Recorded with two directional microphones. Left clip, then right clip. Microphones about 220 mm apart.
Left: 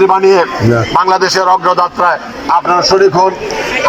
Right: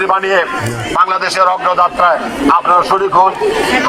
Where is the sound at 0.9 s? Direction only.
30° left (ahead or behind).